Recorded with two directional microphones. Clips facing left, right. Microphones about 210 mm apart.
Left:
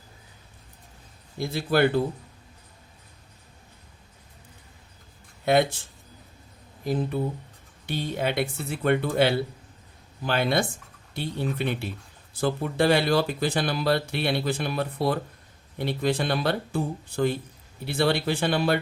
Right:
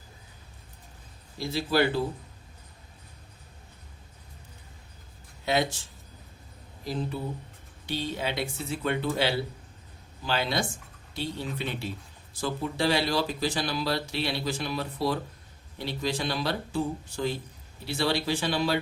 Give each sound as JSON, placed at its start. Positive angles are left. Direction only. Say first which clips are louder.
{"t": 1.4, "sound": "speech", "louder": "left 3 dB", "side_deg": 55}
{"t": 5.5, "sound": "speech", "louder": "left 6 dB", "side_deg": 55}
{"t": 7.9, "sound": "speech", "louder": "left 3 dB", "side_deg": 55}